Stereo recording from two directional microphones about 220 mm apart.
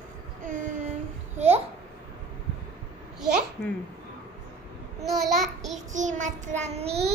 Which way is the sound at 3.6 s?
10° left (ahead or behind).